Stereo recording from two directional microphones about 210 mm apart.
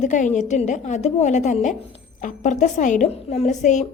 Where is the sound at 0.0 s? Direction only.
35° left (ahead or behind).